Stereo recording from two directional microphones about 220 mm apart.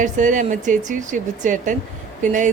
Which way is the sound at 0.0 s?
35° right (ahead or behind).